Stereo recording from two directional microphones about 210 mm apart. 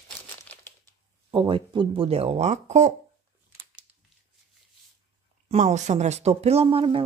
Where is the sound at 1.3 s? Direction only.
25° right (ahead or behind).